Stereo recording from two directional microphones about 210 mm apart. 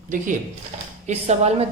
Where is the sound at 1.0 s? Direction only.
30° right (ahead or behind).